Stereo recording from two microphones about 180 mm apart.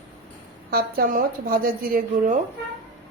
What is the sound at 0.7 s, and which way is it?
A woman's voice, 55° right (ahead or behind).